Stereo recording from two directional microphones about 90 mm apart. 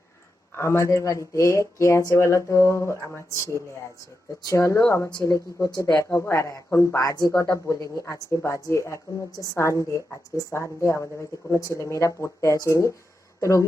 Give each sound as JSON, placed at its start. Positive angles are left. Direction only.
{"t": 0.5, "sound": "a woman's voice", "side_deg": 30}